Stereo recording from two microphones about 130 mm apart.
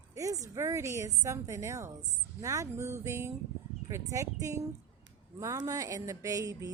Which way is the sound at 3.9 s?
20° right (ahead or behind).